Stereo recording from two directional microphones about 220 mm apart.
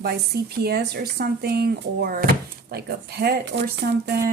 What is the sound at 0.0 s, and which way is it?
Speech, 45° right (ahead or behind).